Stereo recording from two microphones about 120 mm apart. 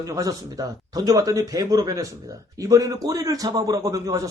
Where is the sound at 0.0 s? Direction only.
30° right (ahead or behind).